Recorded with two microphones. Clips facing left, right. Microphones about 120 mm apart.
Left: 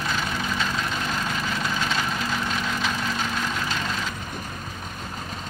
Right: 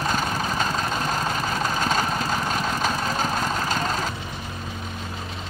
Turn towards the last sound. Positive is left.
turn(degrees=-40)  # may be behind; listen again after turning